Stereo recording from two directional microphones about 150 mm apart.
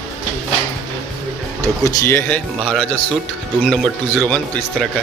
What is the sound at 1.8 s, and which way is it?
Speech, 15° left (ahead or behind).